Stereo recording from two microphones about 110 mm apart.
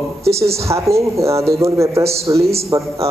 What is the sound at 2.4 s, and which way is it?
Speech, 70° right (ahead or behind).